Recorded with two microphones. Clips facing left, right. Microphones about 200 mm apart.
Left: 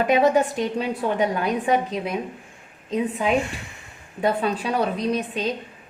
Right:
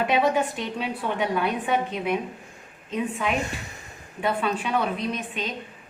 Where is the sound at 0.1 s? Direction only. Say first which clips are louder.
Left 4 dB; 40° left (ahead or behind).